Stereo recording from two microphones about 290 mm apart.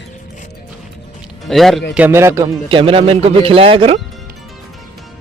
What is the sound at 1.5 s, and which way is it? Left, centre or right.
A man's voice, centre.